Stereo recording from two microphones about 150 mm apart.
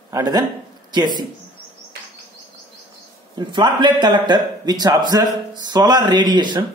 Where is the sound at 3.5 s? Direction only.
30° right (ahead or behind).